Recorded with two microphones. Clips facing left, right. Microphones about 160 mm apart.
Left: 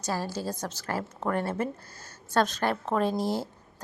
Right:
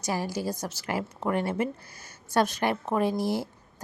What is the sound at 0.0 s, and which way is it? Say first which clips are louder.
A woman's voice: right 2 dB; 15° right (ahead or behind).